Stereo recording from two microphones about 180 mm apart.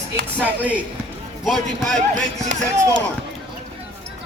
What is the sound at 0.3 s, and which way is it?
Speech, 10° right (ahead or behind).